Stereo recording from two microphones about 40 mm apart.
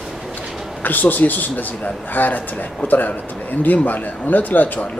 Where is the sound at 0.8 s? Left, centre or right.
Left.